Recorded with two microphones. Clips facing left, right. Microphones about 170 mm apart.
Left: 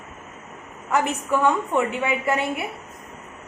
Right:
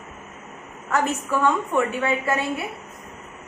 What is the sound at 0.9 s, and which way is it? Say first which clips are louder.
A woman's voice: left 1 dB; 20° left (ahead or behind).